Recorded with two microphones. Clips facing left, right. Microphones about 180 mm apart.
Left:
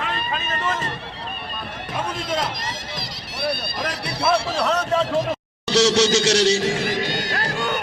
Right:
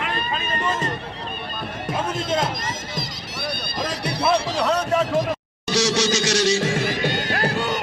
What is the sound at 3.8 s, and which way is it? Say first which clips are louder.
Music: right 1 dB; 20° right (ahead or behind).